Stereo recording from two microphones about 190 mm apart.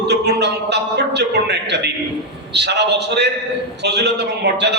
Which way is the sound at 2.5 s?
60° right (ahead or behind).